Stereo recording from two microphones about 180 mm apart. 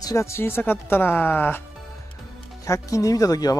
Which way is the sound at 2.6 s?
20° left (ahead or behind).